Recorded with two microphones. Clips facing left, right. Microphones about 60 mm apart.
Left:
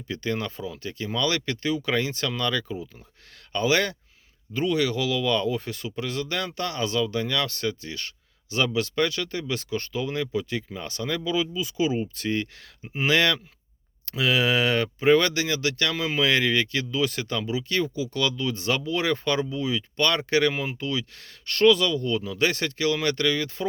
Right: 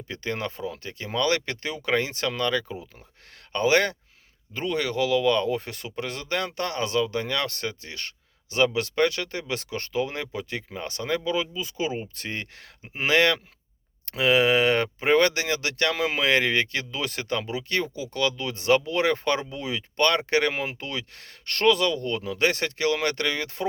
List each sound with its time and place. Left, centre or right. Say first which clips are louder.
0.1 s speech: left 2 dB; right
5.5 s speech: even; right
10.7 s speech: right 2 dB; right
14.1 s speech: right 3 dB; right
16.2 s speech: left 1 dB; right
20.1 s speech: left 1 dB; right
20.5 s speech: left 2 dB; right